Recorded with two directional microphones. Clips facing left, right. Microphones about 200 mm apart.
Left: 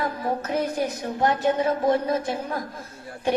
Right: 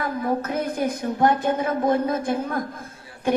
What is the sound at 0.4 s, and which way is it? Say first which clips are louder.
A woman's voice: right 1 dB; 55° right (ahead or behind).